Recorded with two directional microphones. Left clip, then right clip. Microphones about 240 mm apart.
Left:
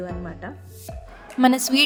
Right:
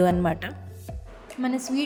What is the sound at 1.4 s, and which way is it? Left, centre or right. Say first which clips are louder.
Speech: left 10 dB; left.